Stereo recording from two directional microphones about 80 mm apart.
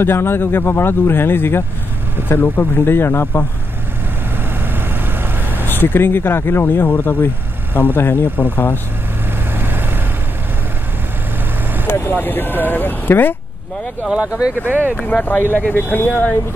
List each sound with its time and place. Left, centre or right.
0.0 s speech: left
5.7 s speech: left
9.6 s vehicle: right
11.9 s speech: left
14.0 s speech: centre
14.7 s speech: right
15.2 s speech: left